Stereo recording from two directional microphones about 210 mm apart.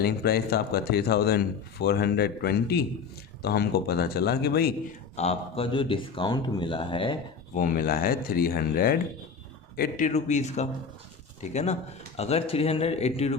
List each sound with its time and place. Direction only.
0.0 s speech: 50° left (ahead or behind)
5.1 s speech: 30° left (ahead or behind)
7.5 s speech: 40° left (ahead or behind)
10.1 s speech: 35° left (ahead or behind)